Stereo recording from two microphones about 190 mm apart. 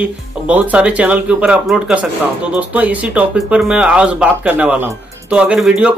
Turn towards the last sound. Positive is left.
turn(degrees=-5)  # may be behind; listen again after turning